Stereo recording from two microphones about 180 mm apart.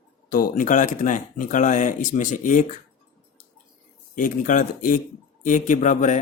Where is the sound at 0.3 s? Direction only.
50° left (ahead or behind).